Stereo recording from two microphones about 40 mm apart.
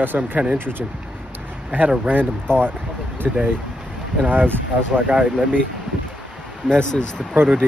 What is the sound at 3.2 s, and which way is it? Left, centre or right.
Speech, centre.